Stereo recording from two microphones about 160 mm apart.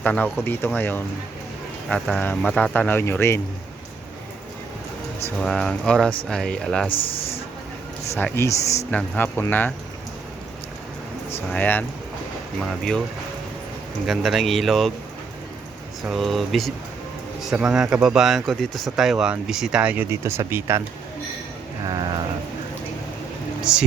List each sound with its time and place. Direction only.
0.0 s speech: 10° left (ahead or behind)
5.4 s speech: 5° left (ahead or behind)
6.9 s a man's voice: 35° left (ahead or behind)
8.1 s speech: 15° left (ahead or behind)
11.4 s speech: 10° left (ahead or behind)
14.1 s speech: centre (ahead or behind)
16.0 s speech: centre (ahead or behind)
21.8 s a sound: 25° right (ahead or behind)
23.7 s speech: 5° right (ahead or behind)